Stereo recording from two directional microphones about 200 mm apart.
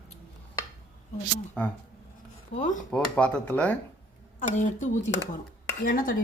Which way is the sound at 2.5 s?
40° left (ahead or behind).